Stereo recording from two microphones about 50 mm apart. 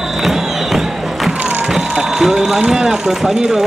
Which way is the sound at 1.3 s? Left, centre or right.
Right.